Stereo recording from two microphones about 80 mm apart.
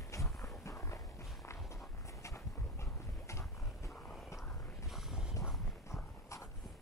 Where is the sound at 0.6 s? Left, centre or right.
Left.